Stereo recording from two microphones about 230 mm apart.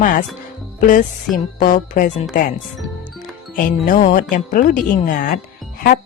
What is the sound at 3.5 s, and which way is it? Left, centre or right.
Speech, left.